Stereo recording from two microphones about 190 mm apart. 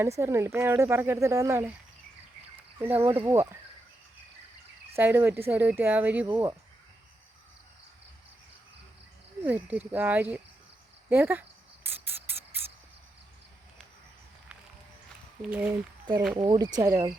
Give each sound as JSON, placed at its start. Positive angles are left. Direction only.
{"t": 0.2, "sound": "speech", "side_deg": -15}
{"t": 2.7, "sound": "speech", "side_deg": -15}
{"t": 4.9, "sound": "speech", "side_deg": -10}
{"t": 9.4, "sound": "speech", "side_deg": -10}
{"t": 11.1, "sound": "cricket", "side_deg": -10}
{"t": 15.4, "sound": "speech", "side_deg": -5}
{"t": 16.4, "sound": "speech", "side_deg": -25}